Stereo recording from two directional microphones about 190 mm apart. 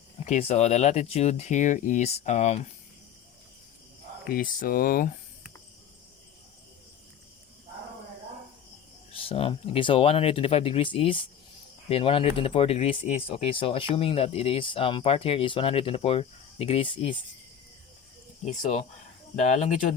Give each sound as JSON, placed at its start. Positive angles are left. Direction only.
{"t": 0.3, "sound": "speech", "side_deg": 35}
{"t": 4.3, "sound": "speech", "side_deg": 50}
{"t": 9.1, "sound": "speech", "side_deg": 30}
{"t": 18.4, "sound": "speech", "side_deg": 35}